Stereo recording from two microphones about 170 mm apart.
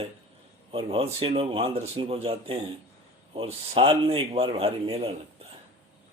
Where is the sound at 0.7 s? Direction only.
35° right (ahead or behind).